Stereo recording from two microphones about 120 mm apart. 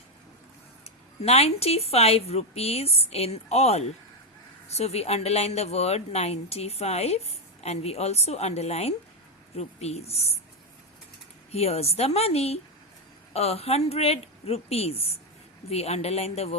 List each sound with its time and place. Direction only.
0.9 s speech: 60° left (ahead or behind)
11.5 s speech: 60° left (ahead or behind)